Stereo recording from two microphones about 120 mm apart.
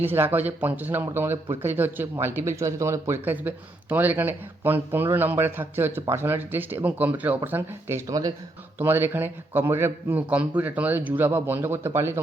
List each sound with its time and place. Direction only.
0.0 s speech: 15° right (ahead or behind)
8.8 s speech: 20° right (ahead or behind)